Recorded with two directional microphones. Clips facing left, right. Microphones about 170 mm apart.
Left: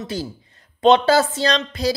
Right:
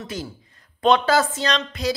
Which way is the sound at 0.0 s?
30° left (ahead or behind).